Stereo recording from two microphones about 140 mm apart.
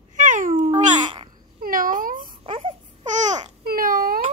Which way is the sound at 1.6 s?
85° right.